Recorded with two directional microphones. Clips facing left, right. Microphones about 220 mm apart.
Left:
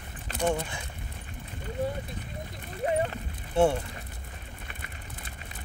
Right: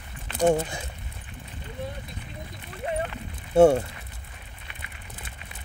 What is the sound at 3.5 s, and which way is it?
Speech, 40° right (ahead or behind).